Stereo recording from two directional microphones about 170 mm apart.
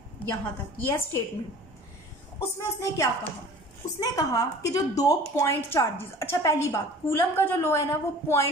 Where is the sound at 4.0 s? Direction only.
20° left (ahead or behind).